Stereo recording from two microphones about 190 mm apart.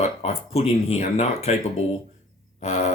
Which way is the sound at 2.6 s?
35° left (ahead or behind).